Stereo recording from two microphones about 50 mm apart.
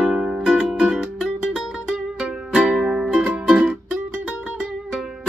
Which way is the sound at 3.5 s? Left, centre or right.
Right.